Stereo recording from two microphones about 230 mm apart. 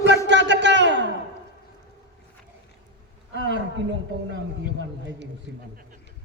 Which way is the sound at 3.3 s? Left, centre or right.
Right.